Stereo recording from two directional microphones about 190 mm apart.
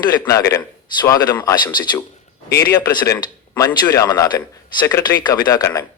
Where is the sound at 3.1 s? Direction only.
15° left (ahead or behind).